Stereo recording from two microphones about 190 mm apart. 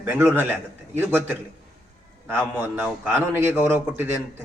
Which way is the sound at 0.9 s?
10° right (ahead or behind).